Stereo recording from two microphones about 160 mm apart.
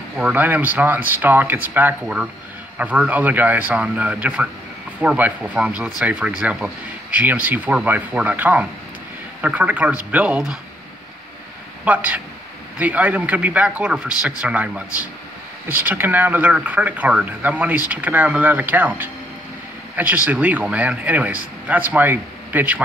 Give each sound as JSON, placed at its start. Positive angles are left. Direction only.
{"t": 0.2, "sound": "speech", "side_deg": -10}
{"t": 11.8, "sound": "speech", "side_deg": -10}
{"t": 20.2, "sound": "speech", "side_deg": -10}